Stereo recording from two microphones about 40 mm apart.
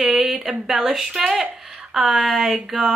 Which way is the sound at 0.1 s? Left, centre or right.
Centre.